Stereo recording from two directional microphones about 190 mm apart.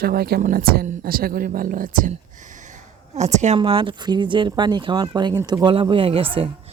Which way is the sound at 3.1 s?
35° right (ahead or behind).